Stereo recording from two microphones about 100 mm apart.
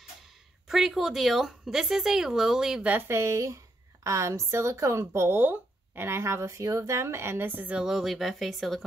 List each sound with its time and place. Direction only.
0.7 s a woman's voice: centre (ahead or behind)
3.1 s speech: 30° right (ahead or behind)
7.8 s a woman's voice: centre (ahead or behind)